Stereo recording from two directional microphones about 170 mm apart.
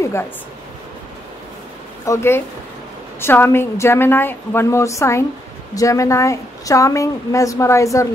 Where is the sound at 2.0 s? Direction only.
15° left (ahead or behind).